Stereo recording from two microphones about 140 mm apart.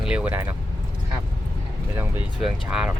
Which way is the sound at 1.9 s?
15° right (ahead or behind).